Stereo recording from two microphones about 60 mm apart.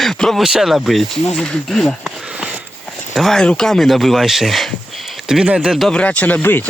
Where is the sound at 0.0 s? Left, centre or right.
Centre.